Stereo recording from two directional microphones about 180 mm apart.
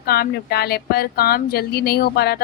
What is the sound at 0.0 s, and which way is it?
Speech, 60° left (ahead or behind).